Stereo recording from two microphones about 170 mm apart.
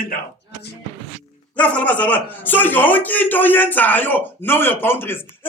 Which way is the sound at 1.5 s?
10° left (ahead or behind).